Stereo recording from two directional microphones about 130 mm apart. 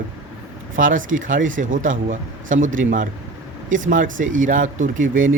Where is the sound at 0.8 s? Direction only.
90° right.